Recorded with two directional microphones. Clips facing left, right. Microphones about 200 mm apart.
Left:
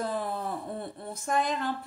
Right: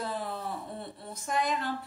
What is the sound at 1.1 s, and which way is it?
Speech, 50° left (ahead or behind).